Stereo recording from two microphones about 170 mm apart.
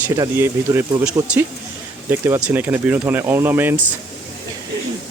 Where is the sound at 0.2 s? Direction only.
15° right (ahead or behind).